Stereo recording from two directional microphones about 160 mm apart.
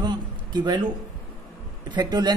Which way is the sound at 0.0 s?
25° right (ahead or behind).